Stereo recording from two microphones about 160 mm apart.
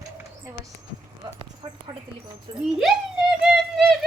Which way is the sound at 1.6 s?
30° right (ahead or behind).